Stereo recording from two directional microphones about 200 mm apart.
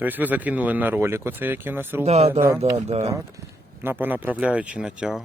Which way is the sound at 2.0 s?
30° right (ahead or behind).